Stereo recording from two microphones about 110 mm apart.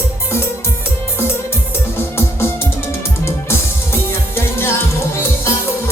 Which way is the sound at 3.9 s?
20° left (ahead or behind).